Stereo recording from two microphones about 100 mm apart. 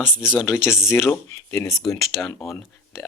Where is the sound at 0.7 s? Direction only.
25° left (ahead or behind).